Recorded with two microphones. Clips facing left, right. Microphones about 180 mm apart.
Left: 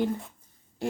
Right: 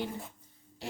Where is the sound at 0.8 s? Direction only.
50° left (ahead or behind).